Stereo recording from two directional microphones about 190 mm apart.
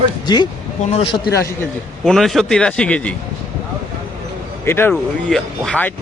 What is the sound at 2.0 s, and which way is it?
A man's voice, centre (ahead or behind).